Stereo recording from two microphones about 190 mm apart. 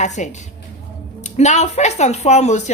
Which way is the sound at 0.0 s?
40° left (ahead or behind).